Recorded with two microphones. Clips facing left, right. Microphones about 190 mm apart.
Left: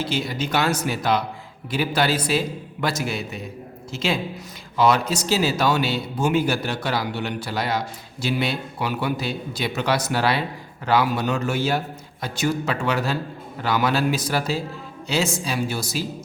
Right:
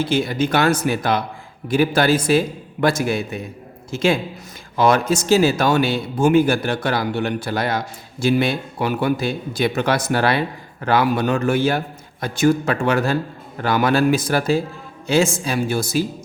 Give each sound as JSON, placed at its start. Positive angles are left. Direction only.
{"t": 0.0, "sound": "a man's voice", "side_deg": -50}